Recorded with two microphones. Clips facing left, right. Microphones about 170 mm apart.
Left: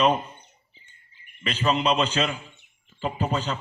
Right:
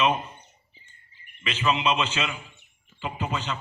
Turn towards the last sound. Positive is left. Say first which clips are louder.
# left 3 dB
turn(degrees=40)  # may be behind; listen again after turning